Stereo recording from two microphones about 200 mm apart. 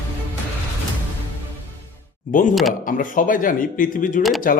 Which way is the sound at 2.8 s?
45° left (ahead or behind).